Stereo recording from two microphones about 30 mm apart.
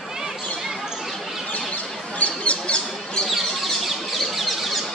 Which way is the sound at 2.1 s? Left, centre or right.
Left.